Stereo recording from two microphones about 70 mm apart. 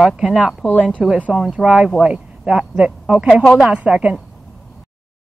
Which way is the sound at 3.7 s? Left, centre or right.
Centre.